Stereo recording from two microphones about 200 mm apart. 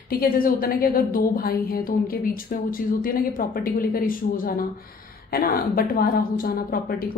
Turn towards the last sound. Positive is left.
turn(degrees=50)  # may be behind; listen again after turning